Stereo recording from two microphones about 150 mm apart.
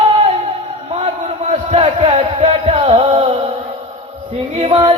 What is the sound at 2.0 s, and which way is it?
Music, 35° right (ahead or behind).